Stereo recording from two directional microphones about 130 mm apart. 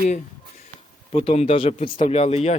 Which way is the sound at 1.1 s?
50° left (ahead or behind).